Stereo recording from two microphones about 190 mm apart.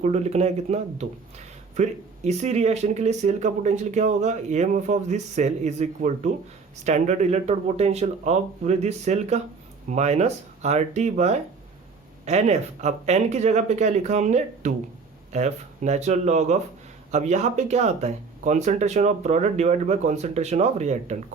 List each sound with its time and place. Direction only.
0.0 s speech: 35° right (ahead or behind)